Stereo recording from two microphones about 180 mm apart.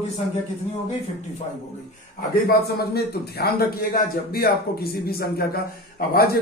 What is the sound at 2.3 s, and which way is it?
A man's voice, 60° left (ahead or behind).